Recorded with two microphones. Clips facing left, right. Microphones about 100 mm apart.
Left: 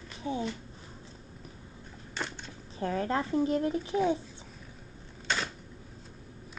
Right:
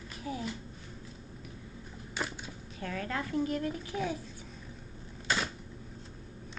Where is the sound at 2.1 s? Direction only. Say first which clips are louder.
Even; 5° right (ahead or behind).